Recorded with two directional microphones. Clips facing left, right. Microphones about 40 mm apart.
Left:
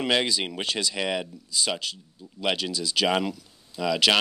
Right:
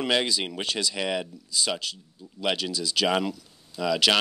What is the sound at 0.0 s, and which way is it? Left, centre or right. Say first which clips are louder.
Speech: left 1 dB; left.